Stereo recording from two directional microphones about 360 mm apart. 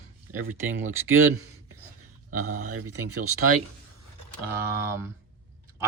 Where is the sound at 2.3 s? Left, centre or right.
Right.